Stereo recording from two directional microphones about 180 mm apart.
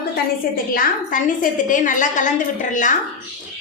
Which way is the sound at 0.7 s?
50° left (ahead or behind).